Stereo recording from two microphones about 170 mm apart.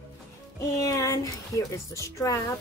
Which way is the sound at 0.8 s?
20° left (ahead or behind).